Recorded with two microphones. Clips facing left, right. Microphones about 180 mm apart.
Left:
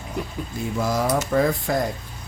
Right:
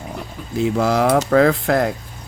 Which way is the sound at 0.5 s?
75° right (ahead or behind).